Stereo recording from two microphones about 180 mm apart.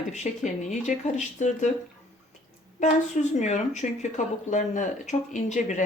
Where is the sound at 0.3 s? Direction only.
40° left (ahead or behind).